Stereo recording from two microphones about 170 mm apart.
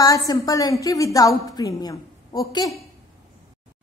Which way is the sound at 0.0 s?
20° left (ahead or behind).